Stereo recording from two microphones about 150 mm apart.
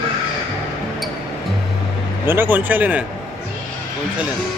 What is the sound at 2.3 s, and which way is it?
Speech, 15° right (ahead or behind).